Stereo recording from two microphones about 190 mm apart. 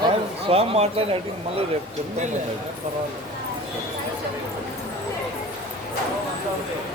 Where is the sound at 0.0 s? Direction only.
30° right (ahead or behind).